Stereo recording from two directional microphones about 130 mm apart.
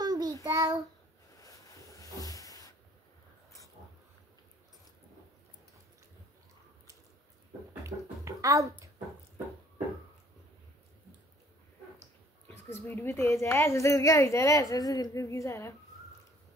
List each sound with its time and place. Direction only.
0.0 s child singing: 30° right (ahead or behind)
1.4 s a sound: 25° left (ahead or behind)
7.8 s music: 25° right (ahead or behind)
12.8 s a woman's voice: 15° left (ahead or behind)